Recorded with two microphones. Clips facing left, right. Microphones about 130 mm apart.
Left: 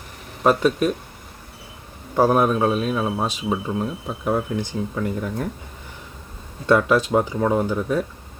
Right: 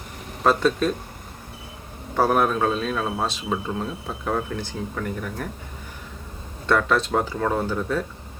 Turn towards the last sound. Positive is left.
turn(degrees=15)  # may be behind; listen again after turning